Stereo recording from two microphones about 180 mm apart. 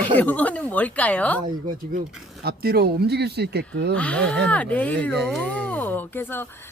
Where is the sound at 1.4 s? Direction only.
50° right (ahead or behind).